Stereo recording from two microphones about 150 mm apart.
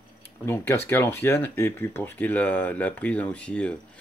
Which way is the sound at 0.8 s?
15° left (ahead or behind).